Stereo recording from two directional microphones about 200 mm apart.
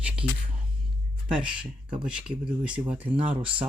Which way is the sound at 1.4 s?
5° right (ahead or behind).